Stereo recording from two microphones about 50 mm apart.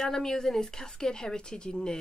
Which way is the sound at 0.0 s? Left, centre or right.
Centre.